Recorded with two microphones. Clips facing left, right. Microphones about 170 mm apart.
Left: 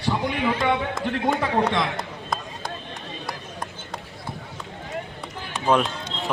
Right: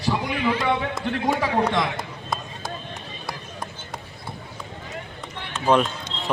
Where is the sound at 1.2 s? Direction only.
5° right (ahead or behind).